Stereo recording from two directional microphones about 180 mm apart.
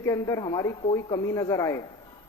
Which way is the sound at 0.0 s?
15° left (ahead or behind).